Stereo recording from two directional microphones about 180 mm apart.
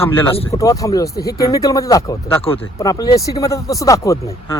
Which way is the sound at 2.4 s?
30° left (ahead or behind).